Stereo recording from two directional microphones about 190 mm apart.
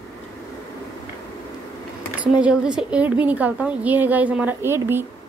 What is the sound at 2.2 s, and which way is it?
A woman's voice, 5° right (ahead or behind).